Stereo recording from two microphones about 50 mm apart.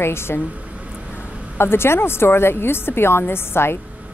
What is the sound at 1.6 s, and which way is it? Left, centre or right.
A woman's voice, left.